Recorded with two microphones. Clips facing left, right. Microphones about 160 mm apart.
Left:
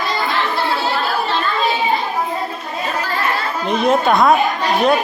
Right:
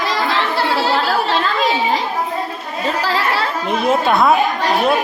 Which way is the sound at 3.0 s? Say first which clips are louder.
Right 3 dB; 90° right.